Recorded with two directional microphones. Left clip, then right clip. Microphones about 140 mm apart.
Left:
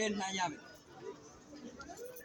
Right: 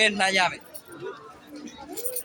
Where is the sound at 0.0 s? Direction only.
25° right (ahead or behind).